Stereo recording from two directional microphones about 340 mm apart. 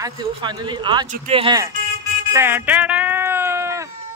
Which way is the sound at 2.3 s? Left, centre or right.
Centre.